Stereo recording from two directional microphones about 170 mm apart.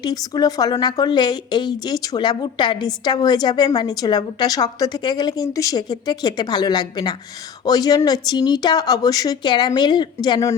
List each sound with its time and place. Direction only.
0.0 s speech: 25° left (ahead or behind)